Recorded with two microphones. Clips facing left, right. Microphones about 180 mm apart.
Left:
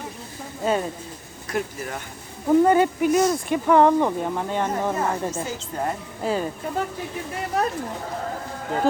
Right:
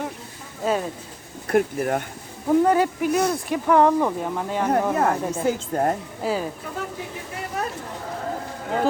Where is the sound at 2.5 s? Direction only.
Centre (ahead or behind).